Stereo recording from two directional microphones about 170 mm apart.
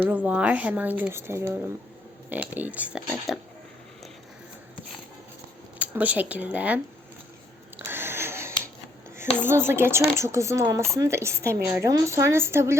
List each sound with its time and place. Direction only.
0.0 s speech: 10° right (ahead or behind)
5.8 s speech: 10° right (ahead or behind)
7.9 s a sound: 15° right (ahead or behind)
9.4 s speech: 15° right (ahead or behind)